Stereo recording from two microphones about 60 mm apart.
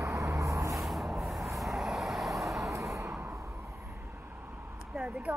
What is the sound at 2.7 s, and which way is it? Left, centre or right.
Vehicle, right.